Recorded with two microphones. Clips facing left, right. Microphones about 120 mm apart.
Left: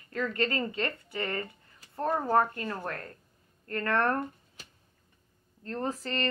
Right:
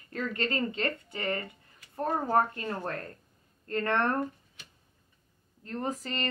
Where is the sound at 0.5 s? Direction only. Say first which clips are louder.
Right 1 dB; 25° right (ahead or behind).